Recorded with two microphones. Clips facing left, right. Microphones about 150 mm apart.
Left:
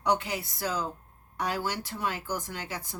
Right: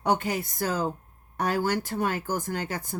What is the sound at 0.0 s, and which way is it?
Speech, 50° right (ahead or behind).